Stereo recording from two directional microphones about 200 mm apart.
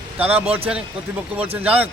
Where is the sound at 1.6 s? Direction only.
10° right (ahead or behind).